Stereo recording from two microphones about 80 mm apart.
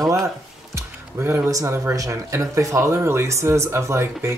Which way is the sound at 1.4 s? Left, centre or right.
Right.